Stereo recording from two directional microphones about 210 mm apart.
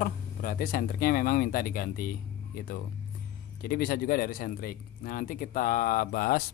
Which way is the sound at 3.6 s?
45° left (ahead or behind).